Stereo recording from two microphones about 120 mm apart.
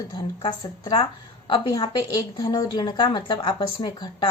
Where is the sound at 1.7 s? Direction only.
35° left (ahead or behind).